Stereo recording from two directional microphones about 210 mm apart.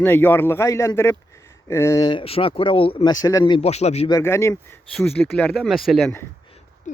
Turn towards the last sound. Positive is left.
turn(degrees=0)  # may be behind; listen again after turning